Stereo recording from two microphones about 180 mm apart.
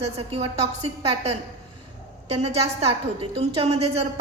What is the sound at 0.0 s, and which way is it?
A woman's voice, 35° right (ahead or behind).